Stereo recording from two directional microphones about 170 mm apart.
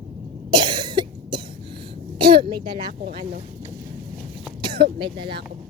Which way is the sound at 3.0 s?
60° right (ahead or behind).